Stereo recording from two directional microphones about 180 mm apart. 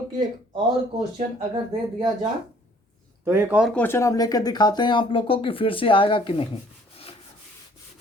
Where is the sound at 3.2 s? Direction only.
10° right (ahead or behind).